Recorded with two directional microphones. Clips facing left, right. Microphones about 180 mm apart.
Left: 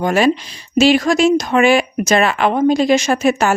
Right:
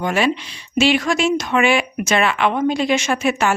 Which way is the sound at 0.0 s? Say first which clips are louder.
Left 5 dB; 40° left (ahead or behind).